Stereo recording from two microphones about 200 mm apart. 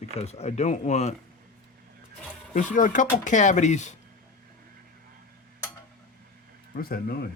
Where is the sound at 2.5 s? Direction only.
40° left (ahead or behind).